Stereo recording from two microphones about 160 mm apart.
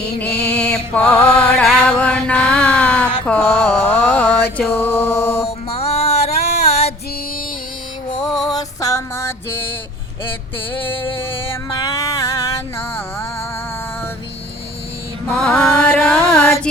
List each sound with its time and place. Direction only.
0.6 s mantra: 5° left (ahead or behind)
5.5 s music: 40° left (ahead or behind)
8.2 s a sound: 5° left (ahead or behind)
8.5 s music: 20° left (ahead or behind)
10.7 s music: 15° left (ahead or behind)
15.3 s music: 5° left (ahead or behind)
15.9 s carnatic music: 10° left (ahead or behind)